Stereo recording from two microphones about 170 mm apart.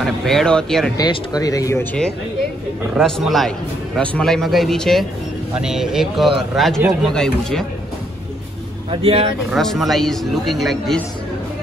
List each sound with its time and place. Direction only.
0.0 s speech: centre (ahead or behind)
0.9 s speech: 20° left (ahead or behind)
3.0 s speech: centre (ahead or behind)
9.0 s speech: 30° right (ahead or behind)
9.5 s speech: centre (ahead or behind)